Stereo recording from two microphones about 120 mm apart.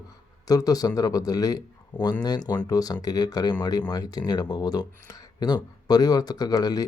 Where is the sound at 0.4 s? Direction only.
30° left (ahead or behind).